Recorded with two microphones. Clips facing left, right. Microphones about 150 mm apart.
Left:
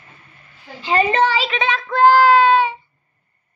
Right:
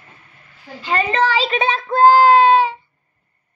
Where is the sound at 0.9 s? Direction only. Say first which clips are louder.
Left 2 dB; 30° left (ahead or behind).